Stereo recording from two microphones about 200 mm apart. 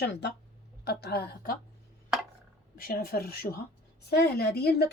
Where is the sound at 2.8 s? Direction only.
50° left (ahead or behind).